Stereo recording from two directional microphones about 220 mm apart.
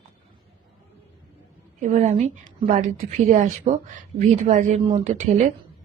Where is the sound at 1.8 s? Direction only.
35° right (ahead or behind).